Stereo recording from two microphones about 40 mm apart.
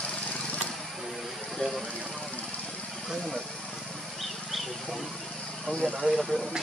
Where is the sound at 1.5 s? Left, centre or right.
Centre.